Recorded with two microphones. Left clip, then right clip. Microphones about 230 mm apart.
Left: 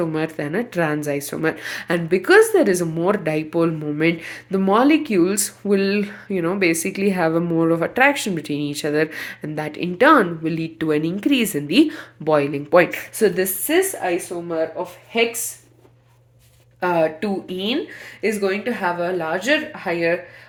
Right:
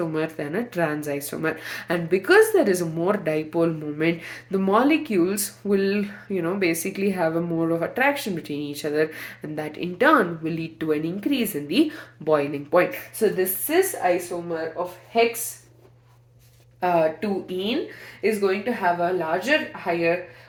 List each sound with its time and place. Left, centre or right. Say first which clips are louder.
0.0 s speech: left 3 dB; left
16.8 s speech: left 2 dB; left